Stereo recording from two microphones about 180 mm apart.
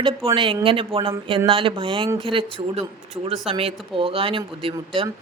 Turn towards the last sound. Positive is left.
turn(degrees=-30)  # may be behind; listen again after turning